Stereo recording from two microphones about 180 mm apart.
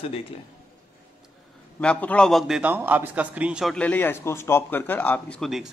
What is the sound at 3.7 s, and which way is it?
Speech, 10° left (ahead or behind).